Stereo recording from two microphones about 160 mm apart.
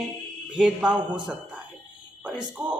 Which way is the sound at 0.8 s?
25° right (ahead or behind).